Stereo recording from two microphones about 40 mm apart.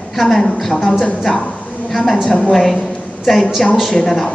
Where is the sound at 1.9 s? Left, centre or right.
Centre.